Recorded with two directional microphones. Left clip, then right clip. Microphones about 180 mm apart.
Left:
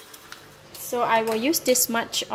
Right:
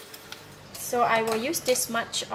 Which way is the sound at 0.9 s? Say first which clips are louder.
Left 1 dB; 35° left (ahead or behind).